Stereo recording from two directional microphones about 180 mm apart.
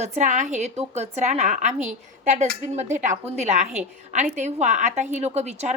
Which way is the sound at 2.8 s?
40° right (ahead or behind).